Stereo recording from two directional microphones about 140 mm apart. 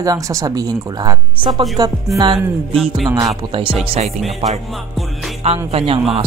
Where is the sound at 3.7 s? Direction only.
50° right (ahead or behind).